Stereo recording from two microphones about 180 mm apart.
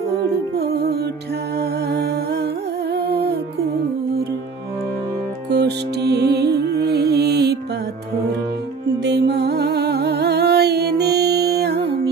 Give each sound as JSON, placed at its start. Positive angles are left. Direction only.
{"t": 0.2, "sound": "music", "side_deg": -60}
{"t": 5.5, "sound": "music", "side_deg": -65}
{"t": 9.0, "sound": "music", "side_deg": -70}